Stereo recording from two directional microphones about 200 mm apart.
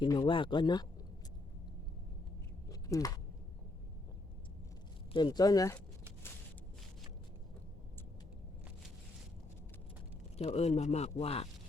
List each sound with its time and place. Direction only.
0.0 s speech: 25° left (ahead or behind)
2.6 s a sound: 15° left (ahead or behind)
5.1 s speech: 20° left (ahead or behind)
10.3 s speech: 30° left (ahead or behind)